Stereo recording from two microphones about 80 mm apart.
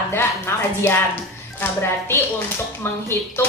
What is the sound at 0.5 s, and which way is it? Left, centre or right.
Speech, left.